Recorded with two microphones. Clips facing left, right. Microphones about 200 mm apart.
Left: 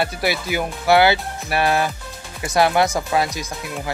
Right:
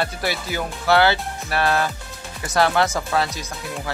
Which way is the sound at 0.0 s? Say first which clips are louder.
Left 3 dB; 10° left (ahead or behind).